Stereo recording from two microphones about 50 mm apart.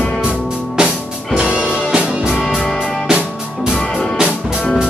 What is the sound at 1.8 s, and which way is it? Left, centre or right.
Music, centre.